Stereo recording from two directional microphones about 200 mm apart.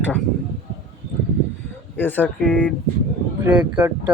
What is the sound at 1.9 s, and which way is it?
Speech, 10° left (ahead or behind).